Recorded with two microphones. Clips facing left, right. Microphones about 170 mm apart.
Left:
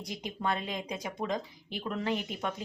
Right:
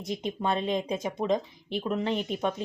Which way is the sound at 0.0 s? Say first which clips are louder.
Right 5 dB; 25° right (ahead or behind).